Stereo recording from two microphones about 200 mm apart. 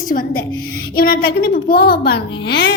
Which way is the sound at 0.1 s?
45° left (ahead or behind).